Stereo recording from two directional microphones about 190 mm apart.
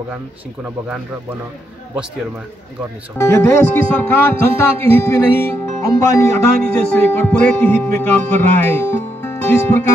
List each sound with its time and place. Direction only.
3.2 s speech: 15° left (ahead or behind)